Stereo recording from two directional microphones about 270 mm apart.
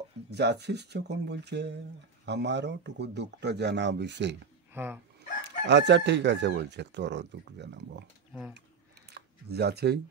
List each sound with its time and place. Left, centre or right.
0.3 s chicken: right
4.7 s speech: centre
5.4 s chicken: right
8.3 s speech: centre
9.1 s a sound: right